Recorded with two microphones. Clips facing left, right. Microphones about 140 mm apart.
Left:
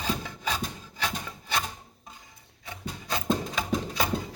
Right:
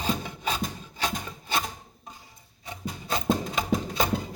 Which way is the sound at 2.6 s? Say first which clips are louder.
Right 2 dB; 20° right (ahead or behind).